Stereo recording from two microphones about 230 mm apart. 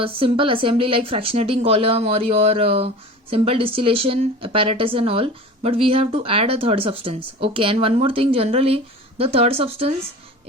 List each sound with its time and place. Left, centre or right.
0.0 s speech: right